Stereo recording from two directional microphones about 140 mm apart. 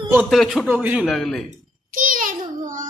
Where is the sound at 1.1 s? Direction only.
Centre (ahead or behind).